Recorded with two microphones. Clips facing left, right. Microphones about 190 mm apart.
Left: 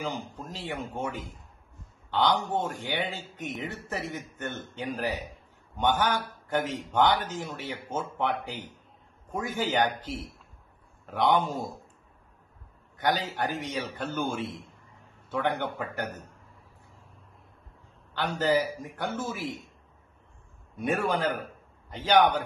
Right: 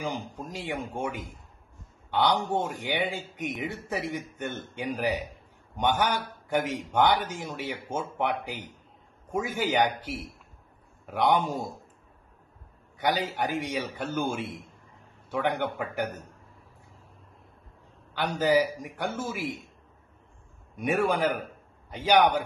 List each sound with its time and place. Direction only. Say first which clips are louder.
0.0 s speech: right 1 dB; 15° right (ahead or behind)
2.0 s a sound: even; 10° right (ahead or behind)
2.5 s speech: right 1 dB; 10° right (ahead or behind)
12.9 s speech: right 1 dB; 10° right (ahead or behind)
18.1 s speech: right 2 dB; 10° right (ahead or behind)
20.7 s speech: right 2 dB; 10° right (ahead or behind)